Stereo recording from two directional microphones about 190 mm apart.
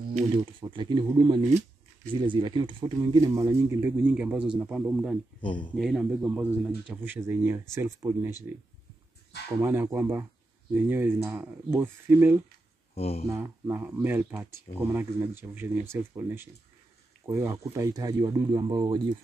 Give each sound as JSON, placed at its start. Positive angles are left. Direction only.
{"t": 0.1, "sound": "speech", "side_deg": -25}
{"t": 5.4, "sound": "speech", "side_deg": 25}
{"t": 5.8, "sound": "speech", "side_deg": 0}
{"t": 9.6, "sound": "speech", "side_deg": -10}
{"t": 12.9, "sound": "speech", "side_deg": 35}
{"t": 13.3, "sound": "speech", "side_deg": -15}